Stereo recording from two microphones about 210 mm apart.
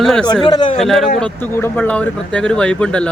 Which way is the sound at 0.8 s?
Centre (ahead or behind).